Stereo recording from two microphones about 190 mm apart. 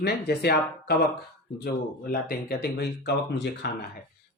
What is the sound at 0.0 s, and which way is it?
Speech, 60° left (ahead or behind).